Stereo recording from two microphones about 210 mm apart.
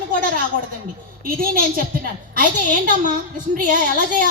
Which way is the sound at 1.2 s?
45° right (ahead or behind).